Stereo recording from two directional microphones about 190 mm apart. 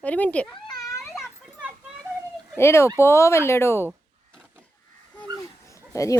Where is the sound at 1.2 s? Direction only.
5° right (ahead or behind).